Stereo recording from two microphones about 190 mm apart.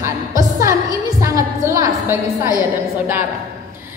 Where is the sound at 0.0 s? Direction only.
15° right (ahead or behind).